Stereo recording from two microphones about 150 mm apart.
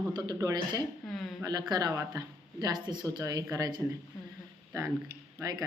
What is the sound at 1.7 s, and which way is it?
Speech, 25° right (ahead or behind).